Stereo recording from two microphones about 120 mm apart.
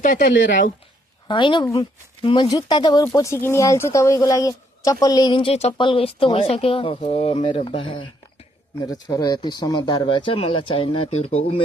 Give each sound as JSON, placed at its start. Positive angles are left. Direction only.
{"t": 0.0, "sound": "speech", "side_deg": 90}
{"t": 1.3, "sound": "speech", "side_deg": 40}
{"t": 3.0, "sound": "speech", "side_deg": 25}
{"t": 9.1, "sound": "speech", "side_deg": 35}